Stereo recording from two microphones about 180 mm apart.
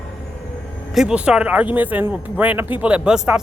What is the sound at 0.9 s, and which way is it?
Speech, 5° right (ahead or behind).